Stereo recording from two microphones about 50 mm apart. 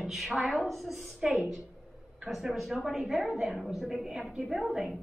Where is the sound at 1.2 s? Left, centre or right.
Centre.